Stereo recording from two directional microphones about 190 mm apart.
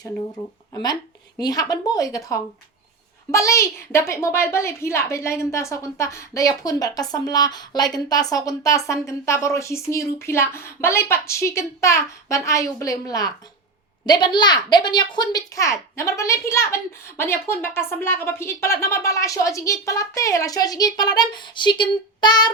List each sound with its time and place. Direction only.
0.7 s a woman's voice: 20° left (ahead or behind)